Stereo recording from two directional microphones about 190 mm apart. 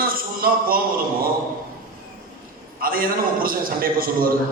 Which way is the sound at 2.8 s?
50° right (ahead or behind).